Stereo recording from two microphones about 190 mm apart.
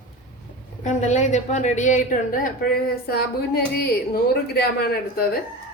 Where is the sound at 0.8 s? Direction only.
40° left (ahead or behind).